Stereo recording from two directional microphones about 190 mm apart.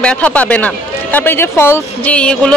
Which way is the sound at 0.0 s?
5° left (ahead or behind).